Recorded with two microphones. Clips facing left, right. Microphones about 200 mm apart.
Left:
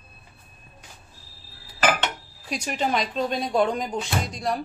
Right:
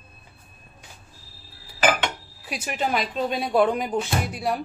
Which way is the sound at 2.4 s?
5° right (ahead or behind).